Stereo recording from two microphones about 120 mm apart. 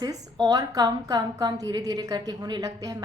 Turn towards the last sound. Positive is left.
turn(degrees=-30)  # may be behind; listen again after turning